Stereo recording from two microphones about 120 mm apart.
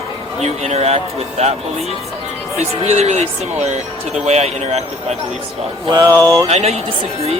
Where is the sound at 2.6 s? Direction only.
65° right (ahead or behind).